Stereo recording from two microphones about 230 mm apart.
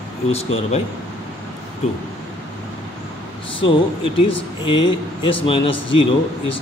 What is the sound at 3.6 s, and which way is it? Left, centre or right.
A man's voice, left.